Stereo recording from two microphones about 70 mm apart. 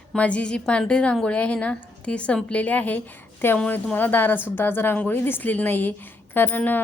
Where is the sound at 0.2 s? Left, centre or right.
Centre.